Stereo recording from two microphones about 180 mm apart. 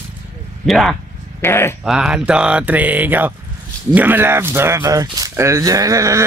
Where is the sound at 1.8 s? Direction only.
5° right (ahead or behind).